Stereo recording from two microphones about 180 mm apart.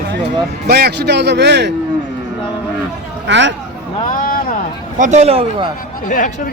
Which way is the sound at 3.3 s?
80° right.